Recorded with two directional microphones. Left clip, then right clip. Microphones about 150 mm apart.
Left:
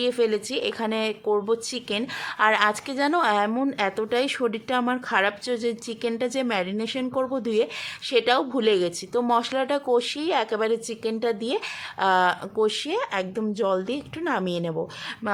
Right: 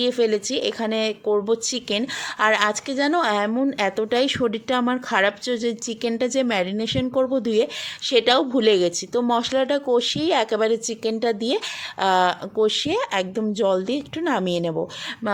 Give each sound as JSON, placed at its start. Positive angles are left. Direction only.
{"t": 0.0, "sound": "speech", "side_deg": -20}